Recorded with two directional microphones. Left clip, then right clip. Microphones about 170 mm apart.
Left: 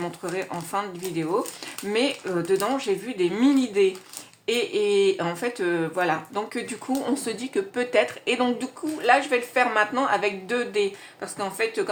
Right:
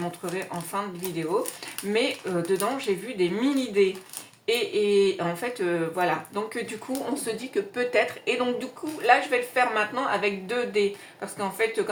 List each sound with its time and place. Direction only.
0.0 s speech: 45° left (ahead or behind)